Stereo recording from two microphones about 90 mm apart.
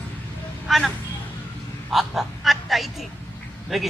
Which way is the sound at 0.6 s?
Centre (ahead or behind).